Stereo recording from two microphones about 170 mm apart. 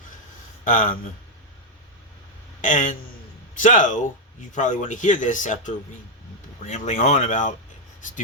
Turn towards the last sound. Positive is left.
turn(degrees=50)  # may be behind; listen again after turning